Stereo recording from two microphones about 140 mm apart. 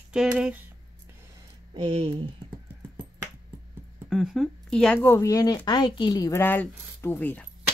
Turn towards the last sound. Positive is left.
turn(degrees=10)  # may be behind; listen again after turning